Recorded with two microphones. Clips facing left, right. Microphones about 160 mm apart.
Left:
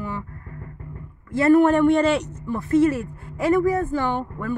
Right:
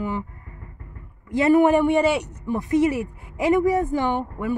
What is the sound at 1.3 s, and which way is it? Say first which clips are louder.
Speech: left 1 dB; 15° right (ahead or behind).